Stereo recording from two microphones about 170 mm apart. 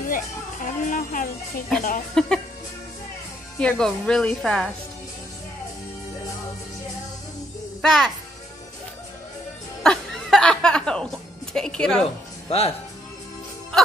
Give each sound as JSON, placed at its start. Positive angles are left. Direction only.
{"t": 0.1, "sound": "speech", "side_deg": 50}
{"t": 2.1, "sound": "speech", "side_deg": 5}
{"t": 3.5, "sound": "speech", "side_deg": 5}
{"t": 7.8, "sound": "a child's voice", "side_deg": 0}
{"t": 9.8, "sound": "a woman's voice", "side_deg": 5}
{"t": 12.4, "sound": "speech", "side_deg": 35}